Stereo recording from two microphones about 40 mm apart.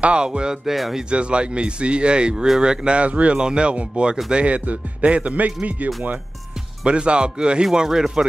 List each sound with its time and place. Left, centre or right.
0.0 s speech: right
0.7 s speech: centre
1.1 s speech: right
3.3 s speech: right
6.9 s speech: right